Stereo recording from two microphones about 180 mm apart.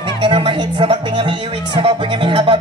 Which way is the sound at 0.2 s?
30° right (ahead or behind).